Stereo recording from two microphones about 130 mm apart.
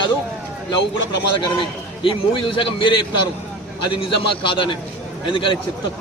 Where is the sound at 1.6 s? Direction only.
40° left (ahead or behind).